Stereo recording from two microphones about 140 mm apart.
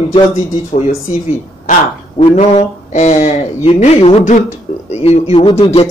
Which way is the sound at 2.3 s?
55° left (ahead or behind).